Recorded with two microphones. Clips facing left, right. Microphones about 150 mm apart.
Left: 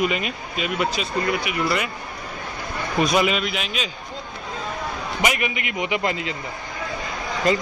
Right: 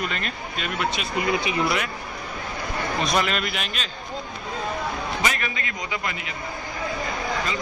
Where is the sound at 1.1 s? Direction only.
20° right (ahead or behind).